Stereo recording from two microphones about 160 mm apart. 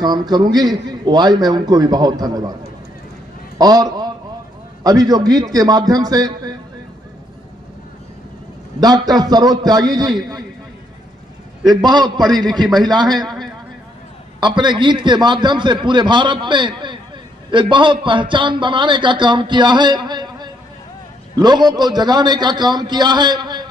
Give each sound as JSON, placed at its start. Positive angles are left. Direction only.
{"t": 0.0, "sound": "a man's voice", "side_deg": -25}
{"t": 3.5, "sound": "a sound", "side_deg": -25}
{"t": 4.8, "sound": "a man's voice", "side_deg": -25}
{"t": 8.8, "sound": "a man's voice", "side_deg": -25}
{"t": 11.7, "sound": "a man's voice", "side_deg": -25}
{"t": 12.3, "sound": "a man's voice", "side_deg": 0}
{"t": 14.4, "sound": "a man's voice", "side_deg": -30}